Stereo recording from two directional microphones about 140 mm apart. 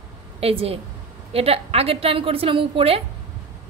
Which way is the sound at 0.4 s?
45° right (ahead or behind).